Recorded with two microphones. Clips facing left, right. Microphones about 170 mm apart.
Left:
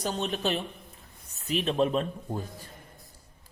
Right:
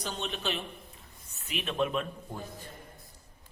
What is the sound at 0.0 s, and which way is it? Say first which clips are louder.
Speech: left 6 dB; 40° left (ahead or behind).